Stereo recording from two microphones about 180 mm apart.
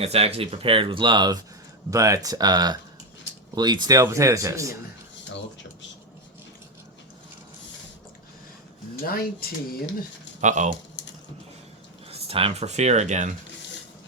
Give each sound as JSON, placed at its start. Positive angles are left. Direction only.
{"t": 0.0, "sound": "speech", "side_deg": -35}
{"t": 9.0, "sound": "speech", "side_deg": 55}
{"t": 10.4, "sound": "speech", "side_deg": -40}
{"t": 11.0, "sound": "a sound", "side_deg": 80}
{"t": 12.1, "sound": "speech", "side_deg": -35}